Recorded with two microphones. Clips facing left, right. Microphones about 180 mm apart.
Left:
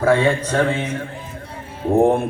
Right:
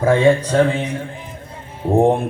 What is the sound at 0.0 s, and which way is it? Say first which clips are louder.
A man's voice: right 3 dB; 15° right (ahead or behind).